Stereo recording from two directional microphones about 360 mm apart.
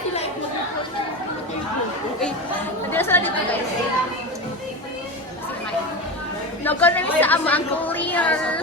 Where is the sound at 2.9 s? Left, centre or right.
Centre.